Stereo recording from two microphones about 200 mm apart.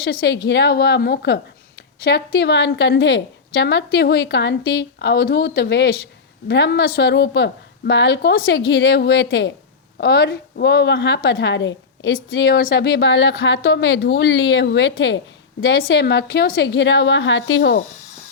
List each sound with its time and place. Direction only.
0.0 s a woman's voice: 50° left (ahead or behind)